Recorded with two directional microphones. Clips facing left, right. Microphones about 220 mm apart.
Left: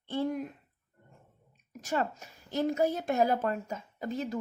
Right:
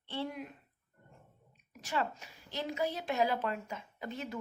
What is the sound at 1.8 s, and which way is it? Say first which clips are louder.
A woman's voice: left 4 dB; 45° left (ahead or behind).